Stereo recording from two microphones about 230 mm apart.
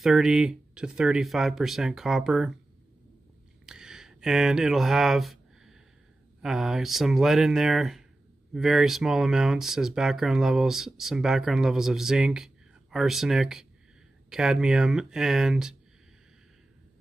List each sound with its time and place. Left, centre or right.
0.0 s speech: centre
3.6 s a sound: centre
6.4 s speech: centre